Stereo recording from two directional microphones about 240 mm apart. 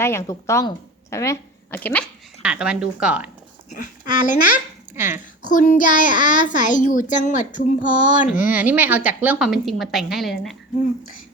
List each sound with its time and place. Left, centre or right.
0.0 s speech: centre
2.4 s a woman's voice: centre
4.0 s a child's voice: left
4.9 s a woman's voice: centre
5.4 s a child's voice: left
8.4 s a woman's voice: centre